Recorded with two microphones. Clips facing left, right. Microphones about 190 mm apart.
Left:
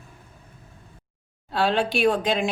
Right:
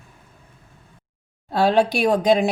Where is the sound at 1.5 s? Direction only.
40° right (ahead or behind).